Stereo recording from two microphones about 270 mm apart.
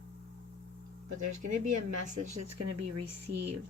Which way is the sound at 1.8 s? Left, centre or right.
Right.